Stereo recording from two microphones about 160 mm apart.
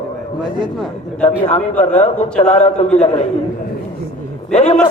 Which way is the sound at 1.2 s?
45° left (ahead or behind).